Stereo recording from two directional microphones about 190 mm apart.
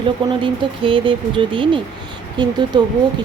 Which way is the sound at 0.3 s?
25° right (ahead or behind).